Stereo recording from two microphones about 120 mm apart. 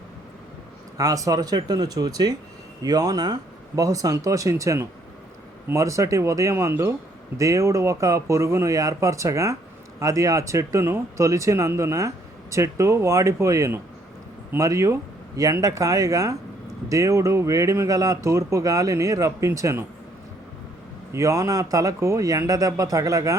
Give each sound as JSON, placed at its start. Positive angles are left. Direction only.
{"t": 0.9, "sound": "speech", "side_deg": -30}
{"t": 21.1, "sound": "speech", "side_deg": -25}